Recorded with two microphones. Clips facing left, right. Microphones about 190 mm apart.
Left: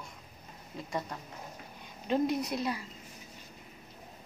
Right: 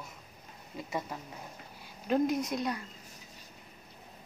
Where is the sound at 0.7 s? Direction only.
5° right (ahead or behind).